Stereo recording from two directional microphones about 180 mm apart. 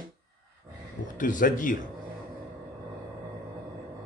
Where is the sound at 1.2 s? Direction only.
45° left (ahead or behind).